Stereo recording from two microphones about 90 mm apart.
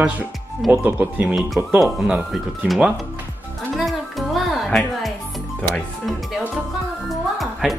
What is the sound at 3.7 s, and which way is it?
Music, centre (ahead or behind).